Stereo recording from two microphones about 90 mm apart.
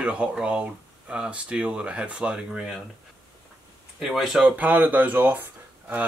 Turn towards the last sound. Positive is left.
turn(degrees=-20)  # may be behind; listen again after turning